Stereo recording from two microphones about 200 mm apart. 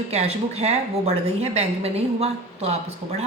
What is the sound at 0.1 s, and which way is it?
A woman's voice, 35° right (ahead or behind).